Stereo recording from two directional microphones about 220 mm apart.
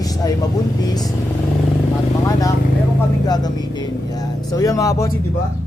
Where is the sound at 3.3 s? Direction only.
20° left (ahead or behind).